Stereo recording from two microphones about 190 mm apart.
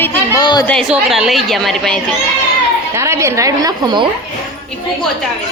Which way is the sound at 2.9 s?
15° right (ahead or behind).